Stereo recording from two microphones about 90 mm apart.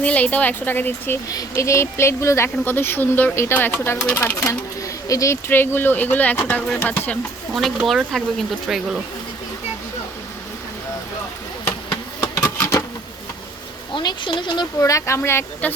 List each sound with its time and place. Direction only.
0.0 s speech: 15° left (ahead or behind)
1.3 s speech: 35° left (ahead or behind)
4.4 s speech: 40° left (ahead or behind)
5.5 s speech: 25° left (ahead or behind)
7.5 s speech: centre (ahead or behind)
13.9 s speech: 55° left (ahead or behind)
14.8 s speech: 35° left (ahead or behind)